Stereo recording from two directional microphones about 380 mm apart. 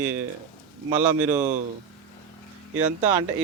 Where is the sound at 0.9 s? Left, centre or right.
Centre.